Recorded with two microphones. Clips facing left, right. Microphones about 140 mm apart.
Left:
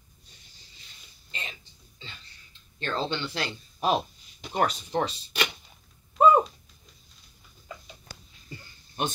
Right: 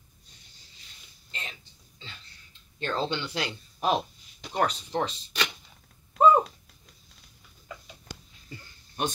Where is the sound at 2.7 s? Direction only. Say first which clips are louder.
Right 1 dB; 15° right (ahead or behind).